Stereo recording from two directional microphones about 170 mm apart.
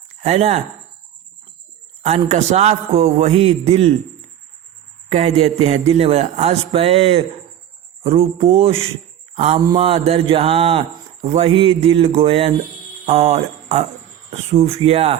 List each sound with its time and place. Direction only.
0.2 s speech: 40° right (ahead or behind)
2.0 s speech: 40° right (ahead or behind)
5.1 s speech: 35° right (ahead or behind)